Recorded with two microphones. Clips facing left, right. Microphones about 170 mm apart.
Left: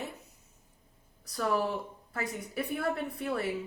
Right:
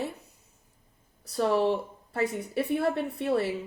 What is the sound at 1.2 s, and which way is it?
A woman's voice, 30° right (ahead or behind).